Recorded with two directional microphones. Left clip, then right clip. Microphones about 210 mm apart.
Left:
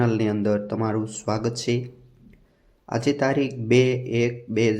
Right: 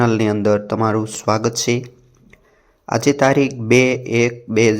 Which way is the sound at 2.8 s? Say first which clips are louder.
Right 8 dB; 15° right (ahead or behind).